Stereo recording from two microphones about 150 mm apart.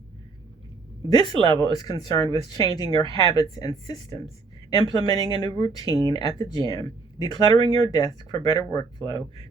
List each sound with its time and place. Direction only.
1.1 s speech: 30° left (ahead or behind)